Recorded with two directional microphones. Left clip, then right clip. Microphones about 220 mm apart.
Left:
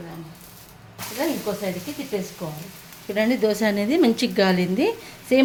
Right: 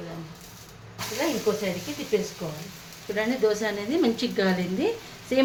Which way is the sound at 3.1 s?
45° left (ahead or behind).